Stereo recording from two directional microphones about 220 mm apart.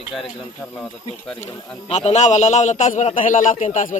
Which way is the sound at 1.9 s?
30° left (ahead or behind).